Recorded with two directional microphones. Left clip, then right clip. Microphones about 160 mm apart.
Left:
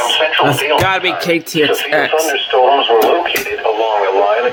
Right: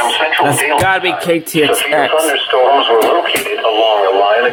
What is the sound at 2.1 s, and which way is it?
Speech, 65° right (ahead or behind).